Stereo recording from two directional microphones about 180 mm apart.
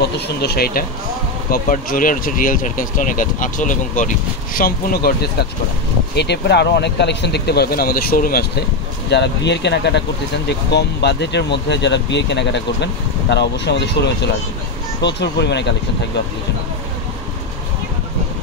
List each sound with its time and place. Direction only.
0.4 s speech: 60° left (ahead or behind)
6.1 s speech: 70° left (ahead or behind)
9.1 s speech: 70° left (ahead or behind)